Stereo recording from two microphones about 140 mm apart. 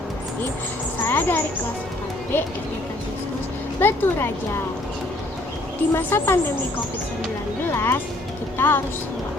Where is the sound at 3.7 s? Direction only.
15° left (ahead or behind).